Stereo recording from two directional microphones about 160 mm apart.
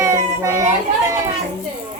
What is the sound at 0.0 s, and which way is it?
Children playing, 20° right (ahead or behind).